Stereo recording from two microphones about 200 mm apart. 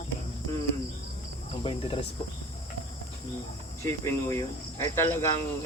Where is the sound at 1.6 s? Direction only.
25° left (ahead or behind).